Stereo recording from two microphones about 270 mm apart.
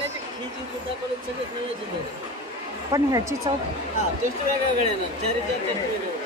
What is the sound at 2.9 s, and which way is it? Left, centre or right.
Speech, centre.